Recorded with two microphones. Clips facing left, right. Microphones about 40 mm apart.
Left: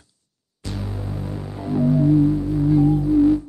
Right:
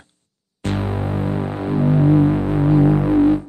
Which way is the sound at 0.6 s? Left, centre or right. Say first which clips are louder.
Right 8 dB; right.